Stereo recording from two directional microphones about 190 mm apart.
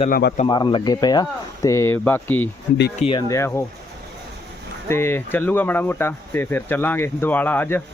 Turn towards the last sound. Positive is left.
turn(degrees=10)  # may be behind; listen again after turning